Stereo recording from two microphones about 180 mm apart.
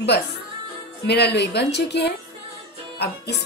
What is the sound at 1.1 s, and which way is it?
Speech, 65° left (ahead or behind).